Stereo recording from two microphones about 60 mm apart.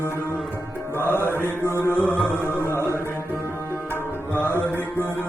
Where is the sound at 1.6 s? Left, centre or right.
Left.